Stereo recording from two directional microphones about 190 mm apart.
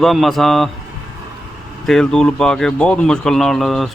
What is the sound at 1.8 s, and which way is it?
Speech, centre (ahead or behind).